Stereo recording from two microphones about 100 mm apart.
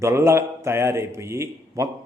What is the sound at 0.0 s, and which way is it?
A man's voice, 25° right (ahead or behind).